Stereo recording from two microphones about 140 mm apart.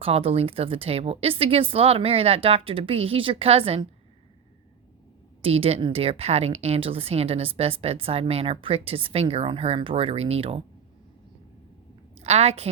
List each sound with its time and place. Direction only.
0.0 s speech: 45° right (ahead or behind)
5.4 s speech: 45° right (ahead or behind)
12.1 s a woman's voice: 50° right (ahead or behind)